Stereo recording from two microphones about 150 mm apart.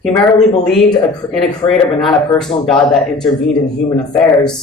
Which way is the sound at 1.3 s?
5° left (ahead or behind).